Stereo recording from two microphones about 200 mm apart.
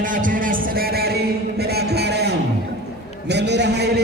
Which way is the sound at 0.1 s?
40° right (ahead or behind).